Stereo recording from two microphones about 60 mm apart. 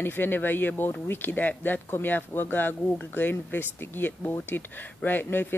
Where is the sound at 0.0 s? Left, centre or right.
Left.